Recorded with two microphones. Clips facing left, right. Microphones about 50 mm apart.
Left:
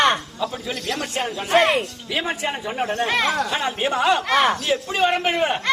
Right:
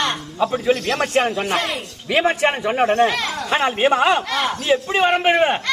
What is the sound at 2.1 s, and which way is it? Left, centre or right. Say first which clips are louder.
A man's voice: right 8 dB; right.